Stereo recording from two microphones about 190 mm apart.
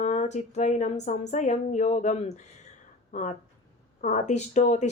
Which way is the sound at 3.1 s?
40° left (ahead or behind).